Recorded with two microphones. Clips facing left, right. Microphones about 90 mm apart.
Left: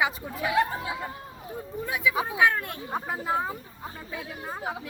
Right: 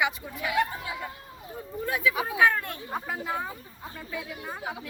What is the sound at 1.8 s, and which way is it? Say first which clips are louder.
Speech: even; 15° left (ahead or behind).